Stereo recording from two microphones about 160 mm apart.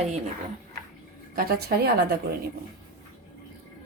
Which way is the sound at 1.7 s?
85° right.